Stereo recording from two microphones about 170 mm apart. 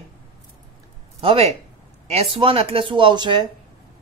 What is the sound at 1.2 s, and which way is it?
Speech, 35° right (ahead or behind).